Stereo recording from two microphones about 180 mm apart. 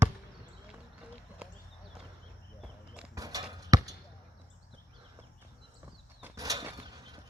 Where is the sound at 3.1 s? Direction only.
20° right (ahead or behind).